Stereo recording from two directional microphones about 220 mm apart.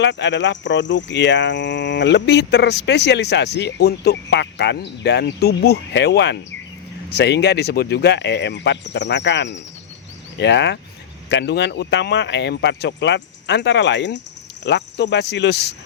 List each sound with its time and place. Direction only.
0.0 s speech: 55° left (ahead or behind)